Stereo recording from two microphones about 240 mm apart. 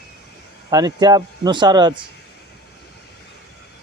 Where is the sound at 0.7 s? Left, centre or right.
Centre.